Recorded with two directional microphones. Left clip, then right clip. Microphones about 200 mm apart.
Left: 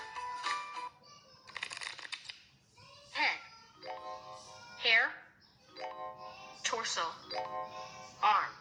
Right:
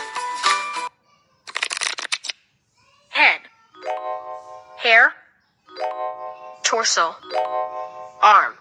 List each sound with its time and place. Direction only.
0.0 s music: 50° right (ahead or behind)
1.5 s shuffling cards: 50° right (ahead or behind)
3.1 s music: 40° right (ahead or behind)